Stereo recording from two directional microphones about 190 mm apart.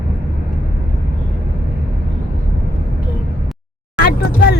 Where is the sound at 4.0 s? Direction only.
55° left (ahead or behind).